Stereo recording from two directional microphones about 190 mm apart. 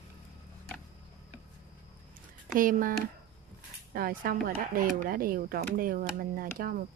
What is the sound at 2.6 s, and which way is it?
Speech, 45° right (ahead or behind).